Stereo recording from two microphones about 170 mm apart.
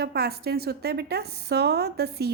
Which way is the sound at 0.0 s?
65° right (ahead or behind).